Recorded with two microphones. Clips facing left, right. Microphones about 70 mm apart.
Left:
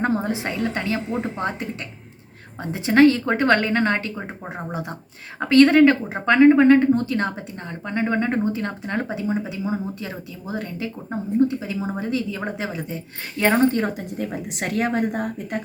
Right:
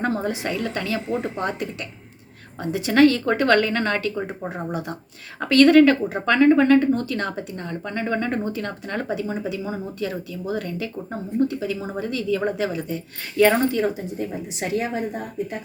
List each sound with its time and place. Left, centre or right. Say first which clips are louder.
0.0 s speech: left 1 dB; left
13.7 s speech: even; left
13.9 s a woman's voice: even; left